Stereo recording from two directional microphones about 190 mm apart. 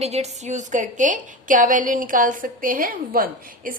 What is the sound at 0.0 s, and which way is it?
A woman's voice, 35° right (ahead or behind).